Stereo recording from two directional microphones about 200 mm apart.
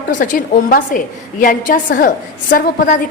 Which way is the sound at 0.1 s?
40° left (ahead or behind).